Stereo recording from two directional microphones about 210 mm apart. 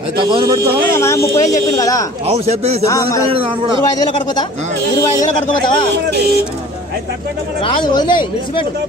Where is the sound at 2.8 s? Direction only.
15° left (ahead or behind).